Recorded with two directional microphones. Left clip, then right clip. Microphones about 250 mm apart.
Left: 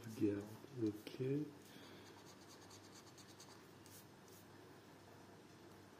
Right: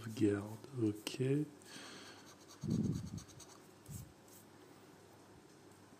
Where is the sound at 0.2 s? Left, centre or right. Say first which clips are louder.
Right 6 dB; right.